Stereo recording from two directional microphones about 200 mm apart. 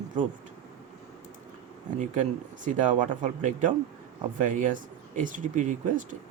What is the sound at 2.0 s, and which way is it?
Speech, 40° right (ahead or behind).